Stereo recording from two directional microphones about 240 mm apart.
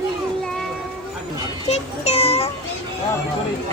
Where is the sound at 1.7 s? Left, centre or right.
Left.